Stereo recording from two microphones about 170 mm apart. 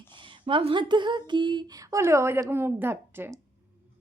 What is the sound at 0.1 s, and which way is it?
A woman's voice, 30° right (ahead or behind).